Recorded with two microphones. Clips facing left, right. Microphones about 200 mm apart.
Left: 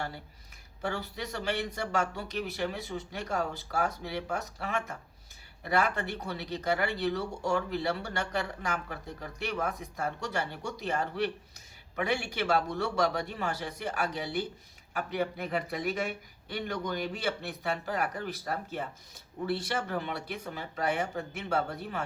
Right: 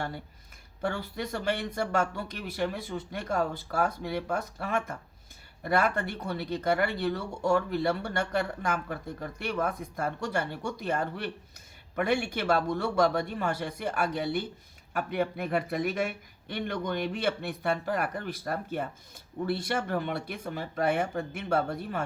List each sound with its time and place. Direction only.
0.8 s speech: 55° right (ahead or behind)